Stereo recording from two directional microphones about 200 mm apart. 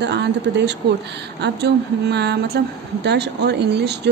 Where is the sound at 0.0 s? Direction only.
60° right (ahead or behind).